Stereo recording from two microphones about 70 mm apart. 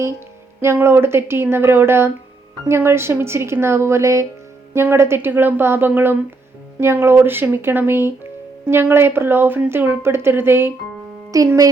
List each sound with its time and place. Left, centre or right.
0.6 s speech: right
11.3 s speech: right